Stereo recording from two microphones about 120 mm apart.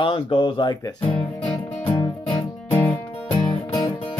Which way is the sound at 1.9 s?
35° left (ahead or behind).